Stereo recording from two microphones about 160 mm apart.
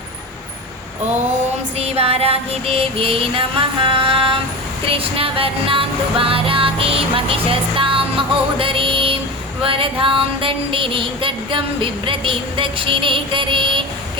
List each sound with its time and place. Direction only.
1.8 s female singing: 40° right (ahead or behind)
4.9 s music: 35° right (ahead or behind)
9.6 s a sound: 35° right (ahead or behind)